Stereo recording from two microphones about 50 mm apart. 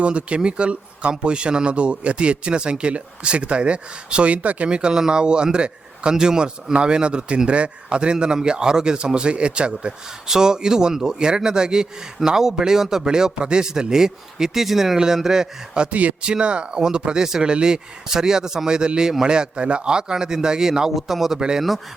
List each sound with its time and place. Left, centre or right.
0.0 s speech: right